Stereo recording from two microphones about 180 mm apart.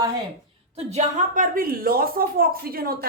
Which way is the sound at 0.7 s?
35° right (ahead or behind).